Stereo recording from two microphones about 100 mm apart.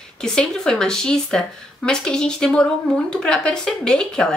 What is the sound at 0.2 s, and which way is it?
Speech, 5° left (ahead or behind).